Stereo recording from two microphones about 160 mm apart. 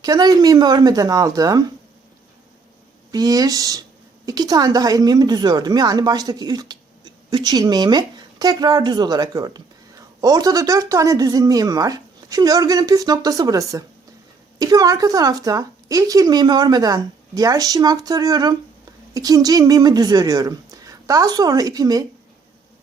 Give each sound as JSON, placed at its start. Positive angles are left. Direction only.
{"t": 0.0, "sound": "speech", "side_deg": -25}
{"t": 3.1, "sound": "speech", "side_deg": -25}